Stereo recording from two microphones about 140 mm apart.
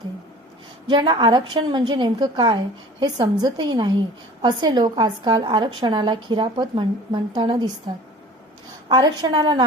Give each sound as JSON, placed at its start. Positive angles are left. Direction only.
{"t": 0.9, "sound": "a woman's voice", "side_deg": -35}
{"t": 8.9, "sound": "a woman's voice", "side_deg": -30}